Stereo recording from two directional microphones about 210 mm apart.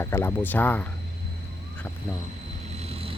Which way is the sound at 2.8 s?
30° right (ahead or behind).